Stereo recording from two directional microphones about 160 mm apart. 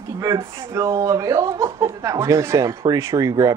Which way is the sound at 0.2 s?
20° right (ahead or behind).